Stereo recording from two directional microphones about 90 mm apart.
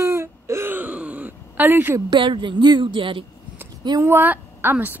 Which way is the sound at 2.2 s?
65° right (ahead or behind).